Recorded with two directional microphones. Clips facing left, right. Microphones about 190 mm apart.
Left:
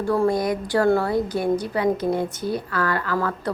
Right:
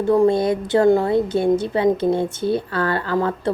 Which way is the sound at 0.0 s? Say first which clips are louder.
Right 5 dB; 20° right (ahead or behind).